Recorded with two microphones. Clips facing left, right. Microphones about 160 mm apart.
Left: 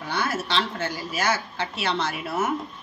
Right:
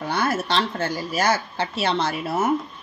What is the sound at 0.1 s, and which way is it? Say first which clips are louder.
Speech: right 3 dB; 45° right (ahead or behind).